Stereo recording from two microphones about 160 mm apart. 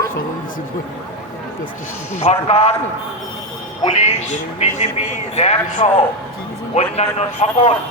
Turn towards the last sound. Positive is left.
turn(degrees=40)  # may be behind; listen again after turning